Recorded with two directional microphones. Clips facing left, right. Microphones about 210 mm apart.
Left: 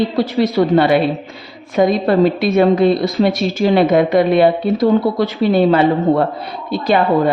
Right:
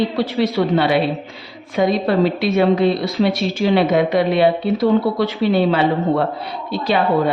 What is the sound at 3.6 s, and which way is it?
Speech, 45° left (ahead or behind).